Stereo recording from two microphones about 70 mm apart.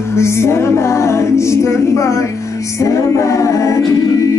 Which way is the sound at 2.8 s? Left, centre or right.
Left.